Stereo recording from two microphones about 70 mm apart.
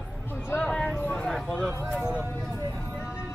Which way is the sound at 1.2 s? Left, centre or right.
Centre.